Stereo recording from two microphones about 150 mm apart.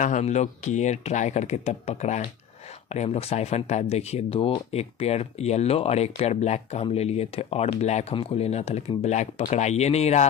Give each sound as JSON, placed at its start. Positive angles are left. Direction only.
{"t": 0.0, "sound": "speech", "side_deg": 50}